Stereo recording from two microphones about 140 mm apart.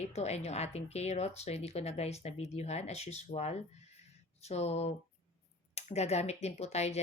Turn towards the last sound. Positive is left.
turn(degrees=50)  # may be behind; listen again after turning